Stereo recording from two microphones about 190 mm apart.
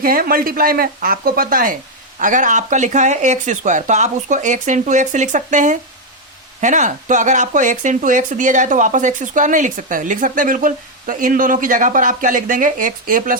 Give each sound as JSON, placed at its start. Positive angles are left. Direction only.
{"t": 0.0, "sound": "speech", "side_deg": -50}